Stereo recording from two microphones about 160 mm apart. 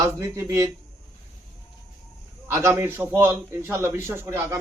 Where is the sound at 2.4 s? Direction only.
15° right (ahead or behind).